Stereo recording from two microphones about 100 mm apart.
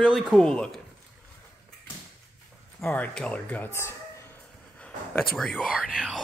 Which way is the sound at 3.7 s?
25° left (ahead or behind).